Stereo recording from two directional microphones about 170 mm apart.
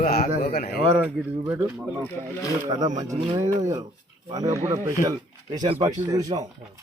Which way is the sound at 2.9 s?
45° right (ahead or behind).